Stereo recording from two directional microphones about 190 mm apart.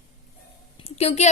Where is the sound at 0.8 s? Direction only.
35° left (ahead or behind).